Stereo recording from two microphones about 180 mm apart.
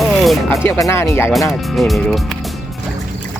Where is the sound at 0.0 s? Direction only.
Centre (ahead or behind).